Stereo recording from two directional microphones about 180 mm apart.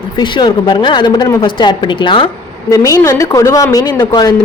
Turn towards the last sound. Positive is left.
turn(degrees=20)  # may be behind; listen again after turning